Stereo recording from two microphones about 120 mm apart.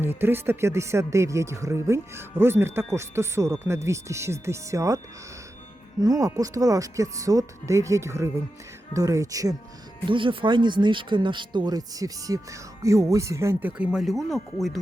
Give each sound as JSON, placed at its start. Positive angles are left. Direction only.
{"t": 0.0, "sound": "speech", "side_deg": -20}
{"t": 6.0, "sound": "speech", "side_deg": -30}
{"t": 10.1, "sound": "speech", "side_deg": -45}